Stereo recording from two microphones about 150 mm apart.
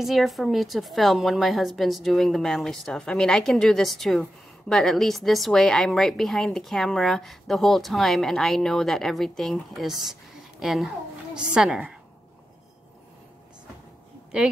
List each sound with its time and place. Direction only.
0.0 s a woman's voice: centre (ahead or behind)